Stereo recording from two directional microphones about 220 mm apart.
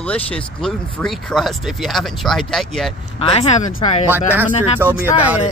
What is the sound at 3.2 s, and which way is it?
Speech, 30° left (ahead or behind).